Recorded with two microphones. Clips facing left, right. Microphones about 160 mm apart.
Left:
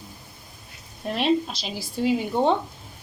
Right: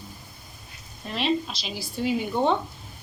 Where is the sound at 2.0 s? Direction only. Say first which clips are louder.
Left 3 dB; 30° left (ahead or behind).